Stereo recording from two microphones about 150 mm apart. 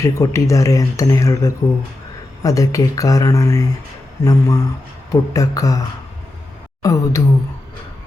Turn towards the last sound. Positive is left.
turn(degrees=20)  # may be behind; listen again after turning